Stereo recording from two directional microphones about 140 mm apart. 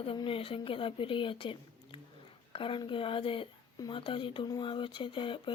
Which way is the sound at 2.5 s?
40° left (ahead or behind).